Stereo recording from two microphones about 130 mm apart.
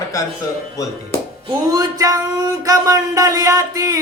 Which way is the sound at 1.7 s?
30° right (ahead or behind).